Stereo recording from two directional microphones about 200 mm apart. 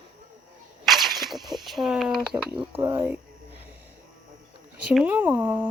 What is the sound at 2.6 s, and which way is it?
Speech, 10° right (ahead or behind).